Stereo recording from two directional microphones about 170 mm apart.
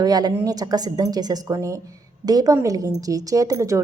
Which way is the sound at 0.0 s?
25° right (ahead or behind).